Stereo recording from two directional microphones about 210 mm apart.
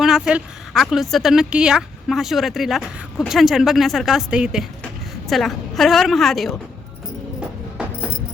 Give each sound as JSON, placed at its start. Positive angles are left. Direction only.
{"t": 0.0, "sound": "speech", "side_deg": -5}